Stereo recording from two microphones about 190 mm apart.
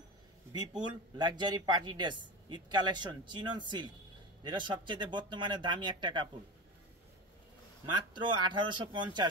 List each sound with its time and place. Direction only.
1.1 s a man's voice: 20° right (ahead or behind)
7.9 s a man's voice: 25° right (ahead or behind)